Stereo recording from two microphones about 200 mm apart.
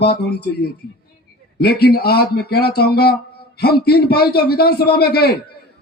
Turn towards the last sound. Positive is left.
turn(degrees=50)  # may be behind; listen again after turning